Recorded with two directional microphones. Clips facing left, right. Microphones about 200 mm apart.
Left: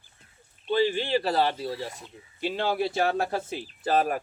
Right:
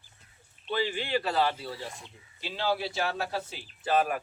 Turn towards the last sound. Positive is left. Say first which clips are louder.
# left 2 dB
turn(degrees=40)  # may be behind; listen again after turning